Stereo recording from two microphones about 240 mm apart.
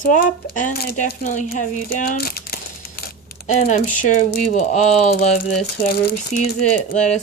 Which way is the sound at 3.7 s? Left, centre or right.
Left.